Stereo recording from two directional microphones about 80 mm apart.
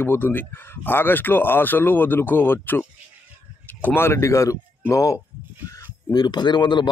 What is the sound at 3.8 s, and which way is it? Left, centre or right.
Speech, left.